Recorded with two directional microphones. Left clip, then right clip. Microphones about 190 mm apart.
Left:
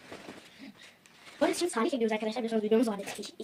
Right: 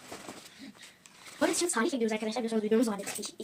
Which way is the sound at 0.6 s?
15° right (ahead or behind).